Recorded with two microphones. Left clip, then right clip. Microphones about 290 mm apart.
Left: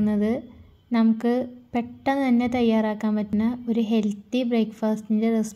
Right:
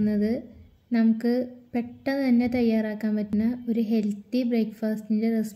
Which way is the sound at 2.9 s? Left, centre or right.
Left.